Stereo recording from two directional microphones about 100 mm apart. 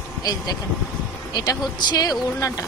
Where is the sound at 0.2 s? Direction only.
40° left (ahead or behind).